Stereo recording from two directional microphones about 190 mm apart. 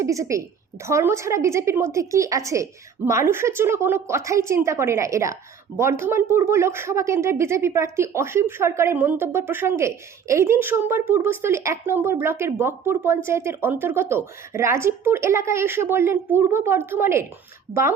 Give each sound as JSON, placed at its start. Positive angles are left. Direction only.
{"t": 0.0, "sound": "a woman's voice", "side_deg": -15}